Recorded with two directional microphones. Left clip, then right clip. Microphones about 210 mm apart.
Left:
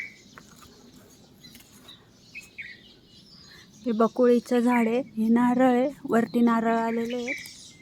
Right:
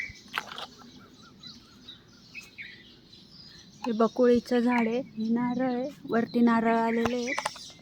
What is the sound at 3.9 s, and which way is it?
Speech, 10° left (ahead or behind).